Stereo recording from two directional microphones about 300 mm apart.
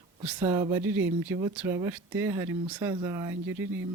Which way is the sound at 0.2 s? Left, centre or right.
Centre.